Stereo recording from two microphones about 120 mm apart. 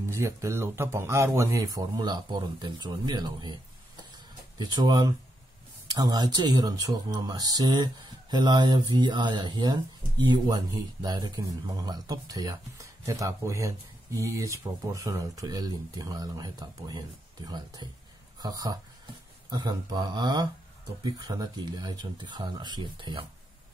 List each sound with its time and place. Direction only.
0.1 s speech: 25° right (ahead or behind)
4.6 s speech: 35° right (ahead or behind)
18.4 s speech: 35° right (ahead or behind)